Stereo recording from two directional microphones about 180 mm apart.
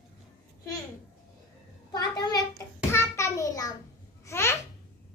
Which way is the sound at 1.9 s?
20° left (ahead or behind).